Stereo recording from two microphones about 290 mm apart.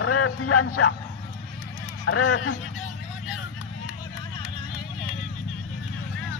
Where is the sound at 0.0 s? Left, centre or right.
Left.